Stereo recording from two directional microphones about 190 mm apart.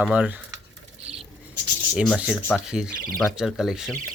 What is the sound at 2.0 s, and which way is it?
Speech, 5° right (ahead or behind).